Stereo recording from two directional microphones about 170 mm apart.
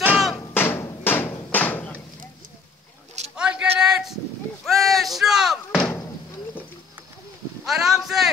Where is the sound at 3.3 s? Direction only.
5° right (ahead or behind).